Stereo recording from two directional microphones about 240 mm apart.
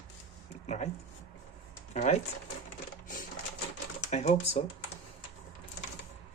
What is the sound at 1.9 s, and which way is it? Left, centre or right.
Speech, left.